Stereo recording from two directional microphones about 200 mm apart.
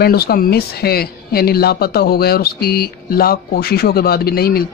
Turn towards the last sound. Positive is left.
turn(degrees=50)  # may be behind; listen again after turning